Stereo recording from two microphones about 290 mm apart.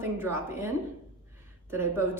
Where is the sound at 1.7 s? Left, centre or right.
Centre.